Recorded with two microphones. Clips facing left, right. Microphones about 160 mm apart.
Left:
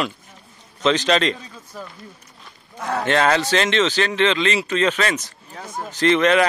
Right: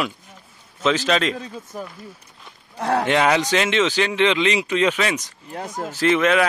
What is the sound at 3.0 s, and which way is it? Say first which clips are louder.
Speech: left 3 dB; 15° right (ahead or behind).